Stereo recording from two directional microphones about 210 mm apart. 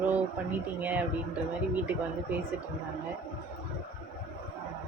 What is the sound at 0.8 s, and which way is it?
Speech, 10° right (ahead or behind).